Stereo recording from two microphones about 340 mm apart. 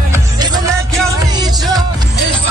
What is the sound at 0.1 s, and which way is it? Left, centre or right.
Music, centre.